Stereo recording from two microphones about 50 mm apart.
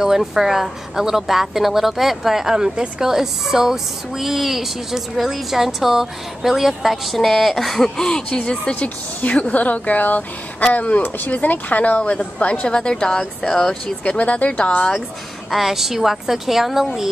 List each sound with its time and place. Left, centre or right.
0.0 s a woman's voice: centre; by 12.6 s left
12.6 s a woman's voice: centre
14.1 s speech: left
15.5 s speech: centre